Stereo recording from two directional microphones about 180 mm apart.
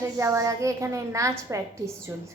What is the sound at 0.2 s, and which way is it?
A woman's voice, 15° right (ahead or behind).